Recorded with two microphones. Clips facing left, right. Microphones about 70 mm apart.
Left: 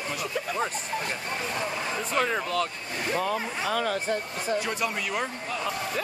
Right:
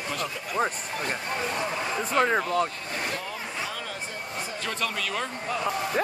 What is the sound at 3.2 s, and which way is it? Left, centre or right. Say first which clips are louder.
Speech: left 5 dB; left.